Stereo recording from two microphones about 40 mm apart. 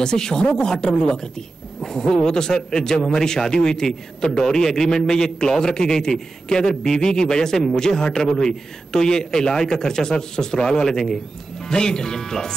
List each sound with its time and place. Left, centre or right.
0.0 s a man's voice: centre